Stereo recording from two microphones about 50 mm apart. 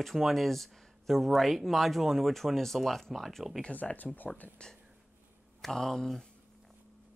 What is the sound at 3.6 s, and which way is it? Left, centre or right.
Speech, left.